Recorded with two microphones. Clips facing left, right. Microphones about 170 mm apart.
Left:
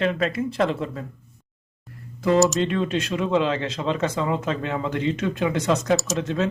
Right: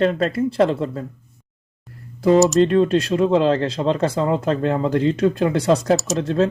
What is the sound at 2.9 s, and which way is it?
Speech, 35° right (ahead or behind).